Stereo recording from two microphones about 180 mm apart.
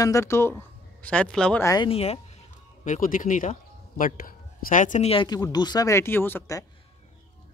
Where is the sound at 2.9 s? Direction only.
50° left (ahead or behind); by 6.7 s 15° left (ahead or behind).